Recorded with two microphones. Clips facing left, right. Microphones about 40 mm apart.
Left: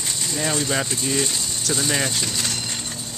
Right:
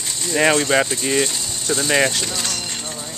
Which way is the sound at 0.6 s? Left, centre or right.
Right.